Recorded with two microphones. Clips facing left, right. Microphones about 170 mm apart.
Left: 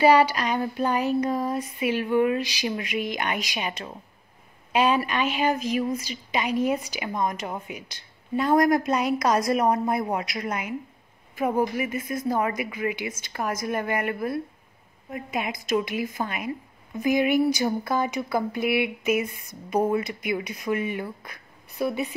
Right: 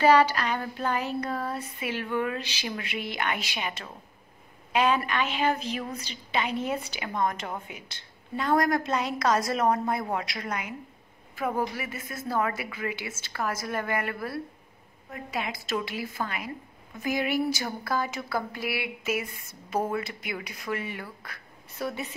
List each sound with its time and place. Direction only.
0.0 s a woman's voice: 15° left (ahead or behind)